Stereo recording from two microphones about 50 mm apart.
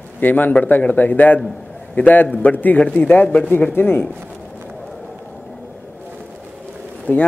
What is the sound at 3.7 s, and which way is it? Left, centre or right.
Speech, left.